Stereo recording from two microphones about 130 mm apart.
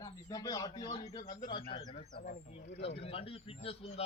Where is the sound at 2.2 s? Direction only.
70° left (ahead or behind); by 4.0 s 50° left (ahead or behind).